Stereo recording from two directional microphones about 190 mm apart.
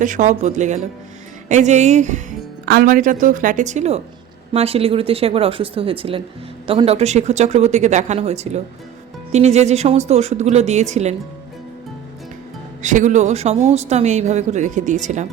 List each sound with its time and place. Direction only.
0.0 s speech: 40° right (ahead or behind)
12.8 s speech: 40° right (ahead or behind)